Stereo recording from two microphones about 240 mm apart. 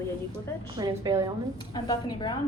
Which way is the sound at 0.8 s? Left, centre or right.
Centre.